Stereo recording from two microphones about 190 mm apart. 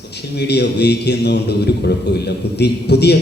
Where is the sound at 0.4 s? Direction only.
60° left (ahead or behind).